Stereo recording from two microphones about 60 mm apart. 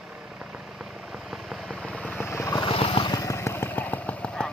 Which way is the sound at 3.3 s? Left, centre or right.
Left.